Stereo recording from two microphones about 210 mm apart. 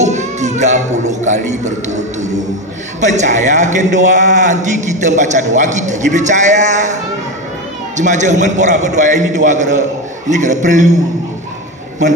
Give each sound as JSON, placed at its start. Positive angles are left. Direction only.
{"t": 0.0, "sound": "a man's voice", "side_deg": -35}
{"t": 8.0, "sound": "a man's voice", "side_deg": -35}